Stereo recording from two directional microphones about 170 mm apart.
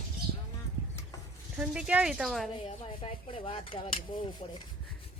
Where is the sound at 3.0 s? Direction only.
30° left (ahead or behind).